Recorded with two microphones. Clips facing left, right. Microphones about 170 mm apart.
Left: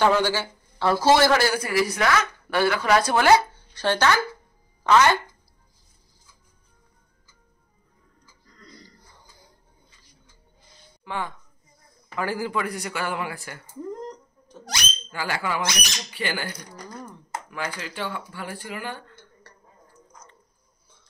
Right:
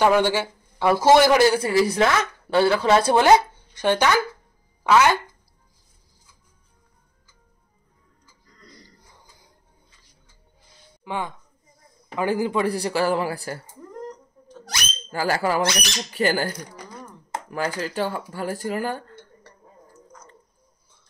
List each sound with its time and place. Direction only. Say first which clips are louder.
0.0 s a man's voice: right 2 dB; 15° right (ahead or behind)
1.5 s a woman's voice: right 4 dB; 30° right (ahead or behind); by 5.2 s 10° right (ahead or behind)
11.1 s a man's voice: right 2 dB; 15° right (ahead or behind)
12.6 s speech: right 8 dB; 30° right (ahead or behind)
15.0 s speech: right 7 dB; 40° right (ahead or behind)